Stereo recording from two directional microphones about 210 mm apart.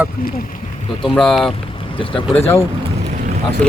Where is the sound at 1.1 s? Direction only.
Centre (ahead or behind).